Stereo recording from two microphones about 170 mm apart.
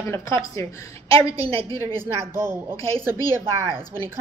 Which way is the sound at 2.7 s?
35° right (ahead or behind).